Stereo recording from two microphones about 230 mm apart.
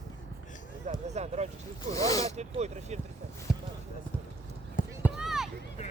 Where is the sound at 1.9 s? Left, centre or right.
Centre.